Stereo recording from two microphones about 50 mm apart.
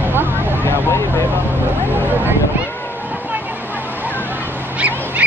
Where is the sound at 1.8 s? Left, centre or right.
Right.